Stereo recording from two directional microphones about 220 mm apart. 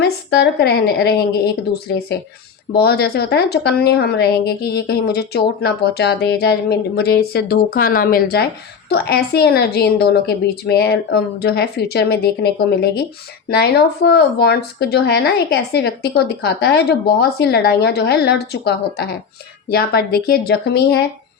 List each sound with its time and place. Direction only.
0.0 s a woman's voice: 50° left (ahead or behind)